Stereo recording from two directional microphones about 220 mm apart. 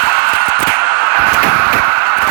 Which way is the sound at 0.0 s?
45° right (ahead or behind).